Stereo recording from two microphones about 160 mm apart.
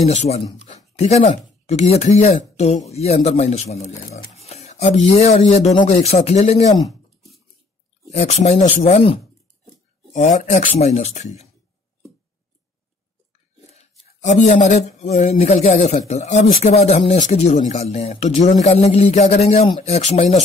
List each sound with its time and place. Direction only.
0.0 s speech: 40° left (ahead or behind)
8.1 s speech: 45° left (ahead or behind)
13.7 s speech: 45° left (ahead or behind)